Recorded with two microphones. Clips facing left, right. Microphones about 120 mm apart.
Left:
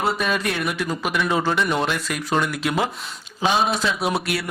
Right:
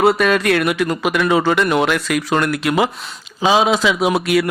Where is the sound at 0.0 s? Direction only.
70° right (ahead or behind).